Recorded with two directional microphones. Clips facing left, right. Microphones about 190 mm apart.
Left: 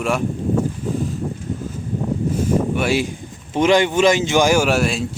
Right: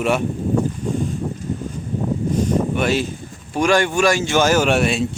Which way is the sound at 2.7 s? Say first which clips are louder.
Even; 10° left (ahead or behind).